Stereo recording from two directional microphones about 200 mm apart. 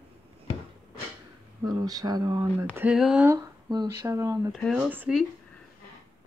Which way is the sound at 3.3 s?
20° right (ahead or behind).